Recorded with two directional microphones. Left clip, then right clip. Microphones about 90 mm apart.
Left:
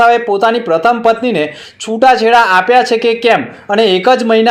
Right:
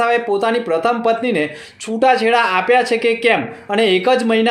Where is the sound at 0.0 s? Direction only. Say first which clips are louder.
Left 7 dB; 35° left (ahead or behind).